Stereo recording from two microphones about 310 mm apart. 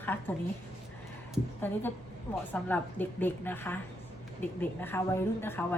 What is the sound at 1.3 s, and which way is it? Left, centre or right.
A woman's voice, centre.